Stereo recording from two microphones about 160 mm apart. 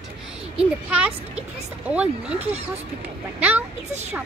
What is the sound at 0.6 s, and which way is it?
Speech, 5° right (ahead or behind).